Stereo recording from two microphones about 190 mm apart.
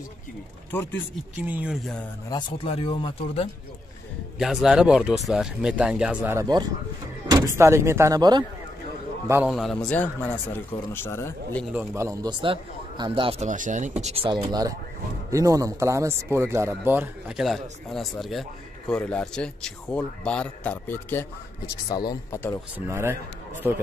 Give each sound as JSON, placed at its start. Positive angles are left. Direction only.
{"t": 1.4, "sound": "a man's voice", "side_deg": -10}
{"t": 2.2, "sound": "speech", "side_deg": 25}
{"t": 4.4, "sound": "a man's voice", "side_deg": 0}
{"t": 6.2, "sound": "speech", "side_deg": -20}
{"t": 9.5, "sound": "a man's voice", "side_deg": 0}
{"t": 11.7, "sound": "a man's voice", "side_deg": -10}
{"t": 22.8, "sound": "speech", "side_deg": -15}